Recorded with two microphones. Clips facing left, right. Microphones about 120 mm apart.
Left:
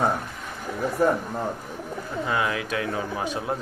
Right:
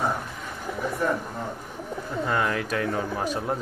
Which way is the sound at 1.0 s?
40° left (ahead or behind).